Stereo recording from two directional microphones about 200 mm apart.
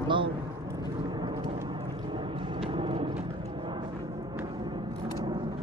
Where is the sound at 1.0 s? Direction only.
20° right (ahead or behind).